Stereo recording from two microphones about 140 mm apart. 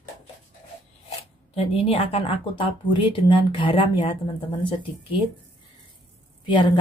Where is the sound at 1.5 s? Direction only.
45° left (ahead or behind).